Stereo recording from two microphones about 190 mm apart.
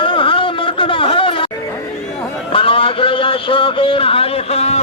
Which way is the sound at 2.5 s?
30° left (ahead or behind).